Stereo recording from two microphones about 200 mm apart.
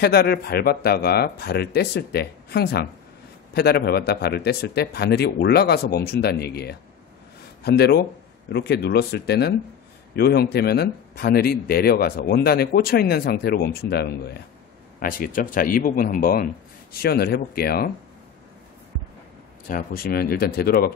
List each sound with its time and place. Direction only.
0.0 s speech: 50° left (ahead or behind)
19.7 s speech: 45° left (ahead or behind)